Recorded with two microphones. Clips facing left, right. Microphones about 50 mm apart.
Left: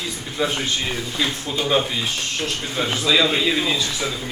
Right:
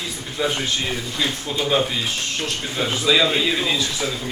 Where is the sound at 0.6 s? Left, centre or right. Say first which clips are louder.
Even; centre.